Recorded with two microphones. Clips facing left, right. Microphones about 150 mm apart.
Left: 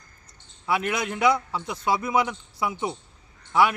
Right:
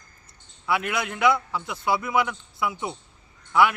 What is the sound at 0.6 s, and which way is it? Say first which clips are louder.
A man's voice: even; 30° left (ahead or behind).